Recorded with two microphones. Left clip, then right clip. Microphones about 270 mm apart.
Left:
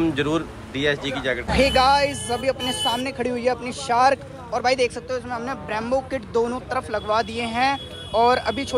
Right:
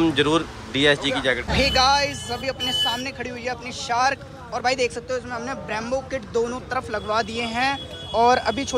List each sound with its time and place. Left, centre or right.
0.0 s speech: centre